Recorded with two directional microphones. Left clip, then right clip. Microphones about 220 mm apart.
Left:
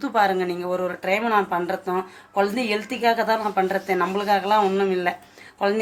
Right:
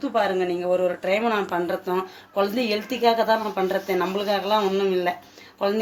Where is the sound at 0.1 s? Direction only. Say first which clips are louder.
Left 2 dB; 25° left (ahead or behind).